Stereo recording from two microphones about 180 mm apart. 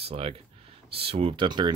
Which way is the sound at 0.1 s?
30° right (ahead or behind).